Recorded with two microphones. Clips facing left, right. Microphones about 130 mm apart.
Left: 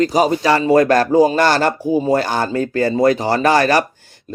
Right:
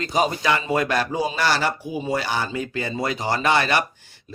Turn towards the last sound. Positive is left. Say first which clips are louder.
# left 7 dB
turn(degrees=40)  # may be behind; listen again after turning